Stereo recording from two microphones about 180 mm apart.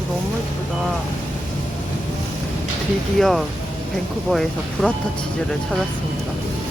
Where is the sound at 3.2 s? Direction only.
Centre (ahead or behind).